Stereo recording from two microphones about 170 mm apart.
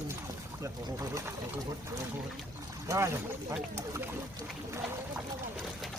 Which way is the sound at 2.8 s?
15° right (ahead or behind).